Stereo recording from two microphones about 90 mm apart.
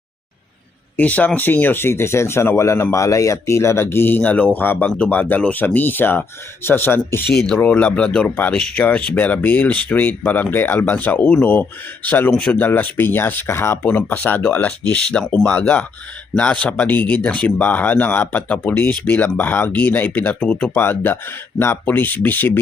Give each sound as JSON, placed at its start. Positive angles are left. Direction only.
{"t": 0.9, "sound": "speech", "side_deg": 15}
{"t": 7.6, "sound": "speech", "side_deg": 15}
{"t": 12.3, "sound": "speech", "side_deg": 10}
{"t": 12.6, "sound": "speech", "side_deg": 20}